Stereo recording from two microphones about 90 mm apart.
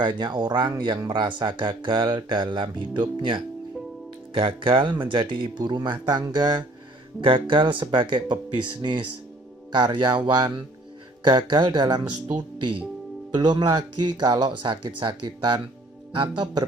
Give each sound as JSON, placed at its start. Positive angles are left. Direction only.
{"t": 0.0, "sound": "speech", "side_deg": -50}
{"t": 4.4, "sound": "speech", "side_deg": -85}
{"t": 7.2, "sound": "speech", "side_deg": -75}